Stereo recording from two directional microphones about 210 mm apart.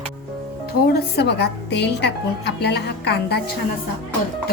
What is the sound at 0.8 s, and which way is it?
A woman's voice, 50° left (ahead or behind).